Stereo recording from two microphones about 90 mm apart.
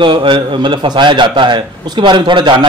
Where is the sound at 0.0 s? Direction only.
65° right (ahead or behind).